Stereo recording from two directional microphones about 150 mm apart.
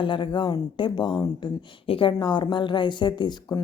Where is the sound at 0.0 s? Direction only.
35° left (ahead or behind).